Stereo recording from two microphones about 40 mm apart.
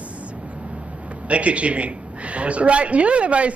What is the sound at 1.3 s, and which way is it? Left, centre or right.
Speech, right.